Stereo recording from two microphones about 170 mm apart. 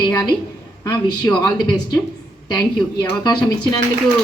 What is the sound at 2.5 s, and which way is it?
A woman's voice, 25° left (ahead or behind).